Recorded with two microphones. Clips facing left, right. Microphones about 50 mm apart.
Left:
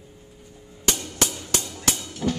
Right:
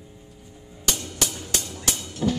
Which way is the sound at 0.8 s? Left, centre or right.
Left.